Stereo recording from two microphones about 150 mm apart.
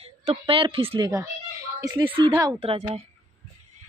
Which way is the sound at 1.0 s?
20° right (ahead or behind).